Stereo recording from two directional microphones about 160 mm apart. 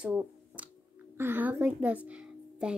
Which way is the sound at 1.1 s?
15° right (ahead or behind).